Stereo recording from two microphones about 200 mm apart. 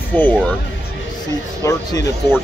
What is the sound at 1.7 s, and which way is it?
Speech, 15° left (ahead or behind).